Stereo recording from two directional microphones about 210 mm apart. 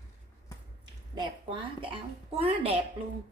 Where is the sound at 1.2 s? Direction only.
25° right (ahead or behind).